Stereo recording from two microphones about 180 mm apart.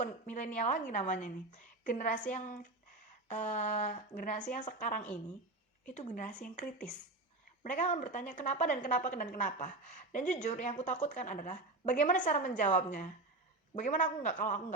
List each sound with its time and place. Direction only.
0.0 s a woman's voice: 45° left (ahead or behind)